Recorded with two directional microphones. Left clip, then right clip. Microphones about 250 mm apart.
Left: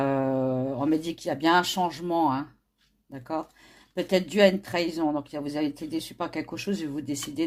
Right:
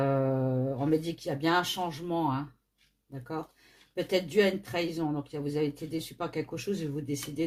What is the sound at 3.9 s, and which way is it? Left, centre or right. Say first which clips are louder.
Speech: left 2 dB; left.